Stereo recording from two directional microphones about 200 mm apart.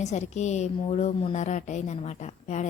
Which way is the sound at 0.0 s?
35° left (ahead or behind).